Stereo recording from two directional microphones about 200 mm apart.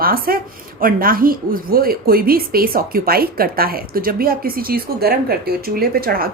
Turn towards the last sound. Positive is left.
turn(degrees=-50)  # may be behind; listen again after turning